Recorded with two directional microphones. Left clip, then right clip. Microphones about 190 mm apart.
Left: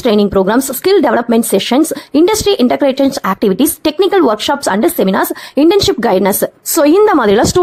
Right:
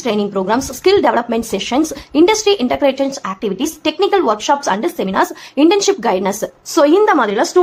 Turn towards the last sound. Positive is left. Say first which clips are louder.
# left 4 dB
turn(degrees=50)  # may be behind; listen again after turning